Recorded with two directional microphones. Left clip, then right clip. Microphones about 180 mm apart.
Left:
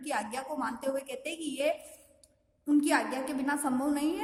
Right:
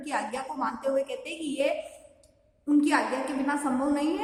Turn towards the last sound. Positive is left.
turn(degrees=45)  # may be behind; listen again after turning